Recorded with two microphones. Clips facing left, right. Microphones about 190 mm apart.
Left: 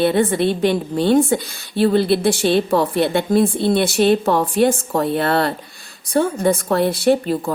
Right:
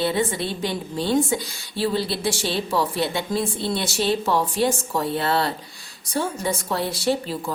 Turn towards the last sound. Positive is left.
turn(degrees=55)  # may be behind; listen again after turning